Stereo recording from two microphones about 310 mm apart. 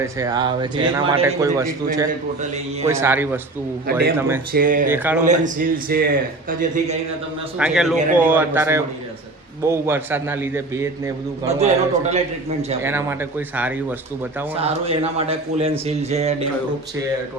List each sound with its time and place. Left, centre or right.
0.0 s speech: centre
2.8 s speech: centre
4.5 s speech: right
4.9 s a man's voice: centre
5.2 s speech: right
7.6 s a man's voice: centre
11.4 s speech: right
12.8 s speech: centre
14.5 s speech: centre